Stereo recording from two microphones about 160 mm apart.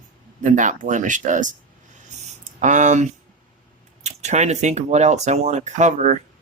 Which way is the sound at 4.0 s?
45° right (ahead or behind).